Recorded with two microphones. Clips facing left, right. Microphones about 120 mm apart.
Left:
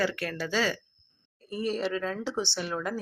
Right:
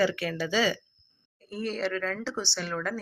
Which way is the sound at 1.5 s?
10° left (ahead or behind).